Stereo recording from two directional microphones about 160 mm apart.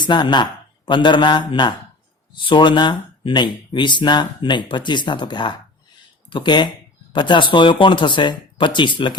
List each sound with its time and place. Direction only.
0.0 s speech: 30° left (ahead or behind)